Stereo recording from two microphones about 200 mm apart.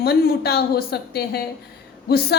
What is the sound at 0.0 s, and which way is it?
A woman's voice, 50° left (ahead or behind).